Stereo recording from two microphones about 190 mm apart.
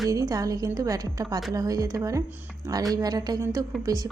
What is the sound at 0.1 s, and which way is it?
A woman's voice, 20° right (ahead or behind).